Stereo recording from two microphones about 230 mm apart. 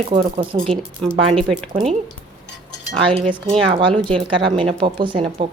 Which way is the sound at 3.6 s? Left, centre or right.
Right.